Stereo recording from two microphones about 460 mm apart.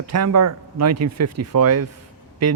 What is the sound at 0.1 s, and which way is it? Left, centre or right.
Speech, right.